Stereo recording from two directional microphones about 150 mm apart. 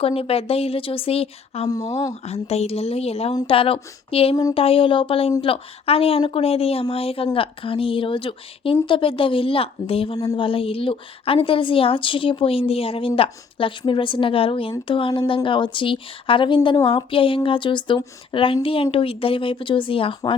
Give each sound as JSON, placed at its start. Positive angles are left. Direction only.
{"t": 0.0, "sound": "a woman's voice", "side_deg": 40}
{"t": 1.6, "sound": "speech", "side_deg": 25}
{"t": 2.2, "sound": "a woman's voice", "side_deg": 45}